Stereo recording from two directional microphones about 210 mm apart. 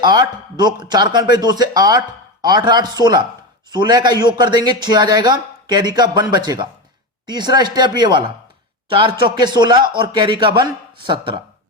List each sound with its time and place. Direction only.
0.0 s speech: 20° right (ahead or behind)